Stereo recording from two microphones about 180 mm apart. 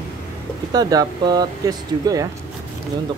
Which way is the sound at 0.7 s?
20° right (ahead or behind).